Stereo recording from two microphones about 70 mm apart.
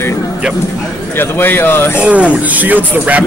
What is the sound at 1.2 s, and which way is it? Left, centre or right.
Speech, left.